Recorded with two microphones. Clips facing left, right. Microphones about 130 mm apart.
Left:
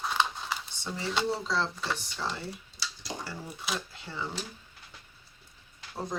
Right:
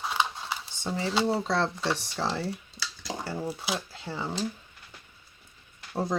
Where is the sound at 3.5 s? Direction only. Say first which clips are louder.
Right 4 dB; 30° right (ahead or behind).